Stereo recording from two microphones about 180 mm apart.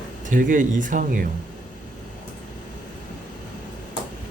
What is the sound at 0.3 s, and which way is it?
Speech, 45° right (ahead or behind).